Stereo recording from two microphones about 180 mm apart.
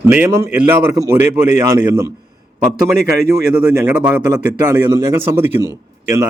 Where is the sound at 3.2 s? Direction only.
15° right (ahead or behind).